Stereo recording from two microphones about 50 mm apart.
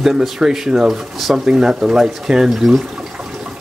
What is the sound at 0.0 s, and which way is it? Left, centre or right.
Speech, centre.